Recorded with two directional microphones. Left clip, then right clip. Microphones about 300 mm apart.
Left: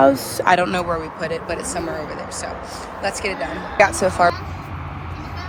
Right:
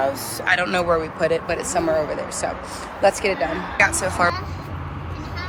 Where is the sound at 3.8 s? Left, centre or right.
Centre.